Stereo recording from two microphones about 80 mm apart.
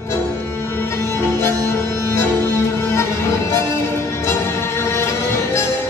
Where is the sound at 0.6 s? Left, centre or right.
Left.